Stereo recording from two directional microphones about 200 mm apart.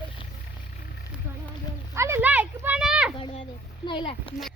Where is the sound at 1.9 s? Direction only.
10° right (ahead or behind).